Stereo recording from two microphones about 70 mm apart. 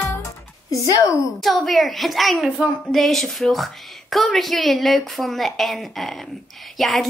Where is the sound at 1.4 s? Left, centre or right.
Centre.